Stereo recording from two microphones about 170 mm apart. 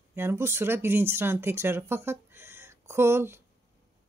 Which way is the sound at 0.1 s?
15° right (ahead or behind).